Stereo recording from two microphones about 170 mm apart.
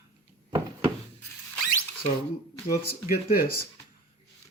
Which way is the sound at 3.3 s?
60° left (ahead or behind).